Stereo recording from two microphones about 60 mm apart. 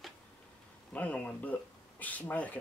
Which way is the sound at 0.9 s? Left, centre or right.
Left.